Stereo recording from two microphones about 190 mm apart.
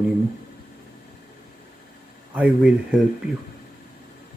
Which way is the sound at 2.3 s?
5° right (ahead or behind).